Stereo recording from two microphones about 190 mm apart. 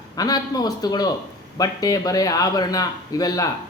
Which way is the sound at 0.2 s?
20° left (ahead or behind).